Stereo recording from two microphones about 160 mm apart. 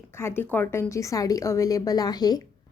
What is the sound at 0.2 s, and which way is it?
A woman's voice, 15° left (ahead or behind).